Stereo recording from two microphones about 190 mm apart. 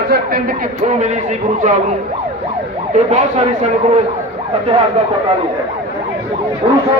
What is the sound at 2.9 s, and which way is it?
Speech, 35° right (ahead or behind).